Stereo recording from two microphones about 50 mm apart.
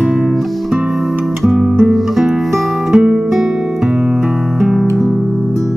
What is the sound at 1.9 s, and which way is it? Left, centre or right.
Music, centre.